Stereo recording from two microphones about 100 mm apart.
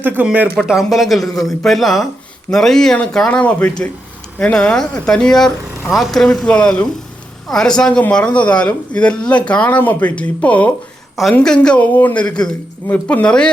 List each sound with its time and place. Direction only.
0.0 s speech: 20° right (ahead or behind)
0.7 s speech: centre (ahead or behind)